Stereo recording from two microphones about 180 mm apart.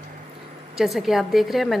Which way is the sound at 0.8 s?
Centre (ahead or behind).